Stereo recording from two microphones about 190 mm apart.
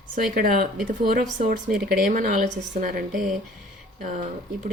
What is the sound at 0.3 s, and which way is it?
Speech, 45° right (ahead or behind).